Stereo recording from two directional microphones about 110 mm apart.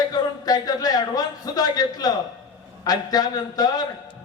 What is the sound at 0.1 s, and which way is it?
A man's voice, 35° left (ahead or behind).